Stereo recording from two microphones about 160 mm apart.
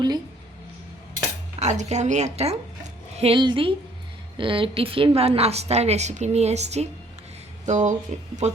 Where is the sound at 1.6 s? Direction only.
45° right (ahead or behind).